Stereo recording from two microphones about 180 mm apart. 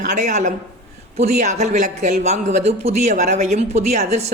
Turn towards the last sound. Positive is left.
turn(degrees=-40)  # may be behind; listen again after turning